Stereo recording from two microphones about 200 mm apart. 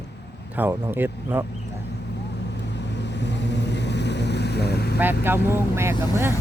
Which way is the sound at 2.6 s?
60° left (ahead or behind).